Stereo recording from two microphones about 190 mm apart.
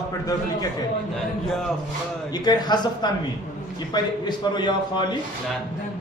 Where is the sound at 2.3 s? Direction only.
20° left (ahead or behind).